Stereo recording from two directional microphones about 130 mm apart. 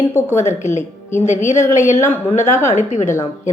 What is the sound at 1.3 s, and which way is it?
Speech, 65° left (ahead or behind).